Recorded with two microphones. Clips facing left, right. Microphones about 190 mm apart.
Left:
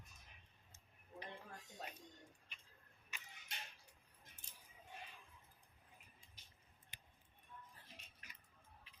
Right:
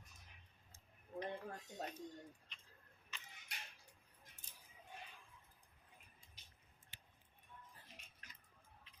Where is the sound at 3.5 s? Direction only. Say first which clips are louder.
Left 2 dB; 25° left (ahead or behind).